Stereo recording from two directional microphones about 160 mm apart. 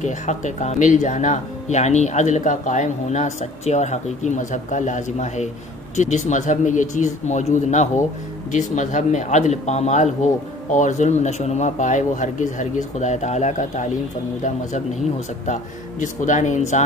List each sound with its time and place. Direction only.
0.0 s speech: 45° left (ahead or behind)
15.4 s speech: 50° left (ahead or behind)